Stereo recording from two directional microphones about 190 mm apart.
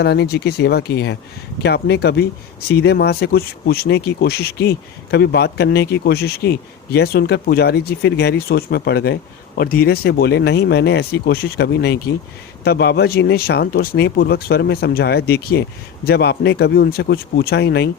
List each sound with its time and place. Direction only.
0.0 s speech: 60° left (ahead or behind)